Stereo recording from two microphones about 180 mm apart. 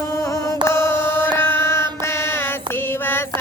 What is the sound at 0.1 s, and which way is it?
Music, 15° left (ahead or behind).